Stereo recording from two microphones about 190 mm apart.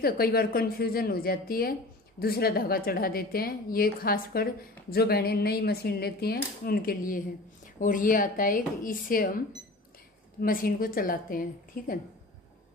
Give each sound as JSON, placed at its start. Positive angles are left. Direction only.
{"t": 0.0, "sound": "a woman's voice", "side_deg": 55}
{"t": 10.4, "sound": "a woman's voice", "side_deg": 50}